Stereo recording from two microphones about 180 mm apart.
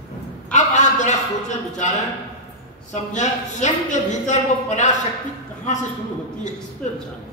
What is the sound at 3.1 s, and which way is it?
Speech, 40° left (ahead or behind).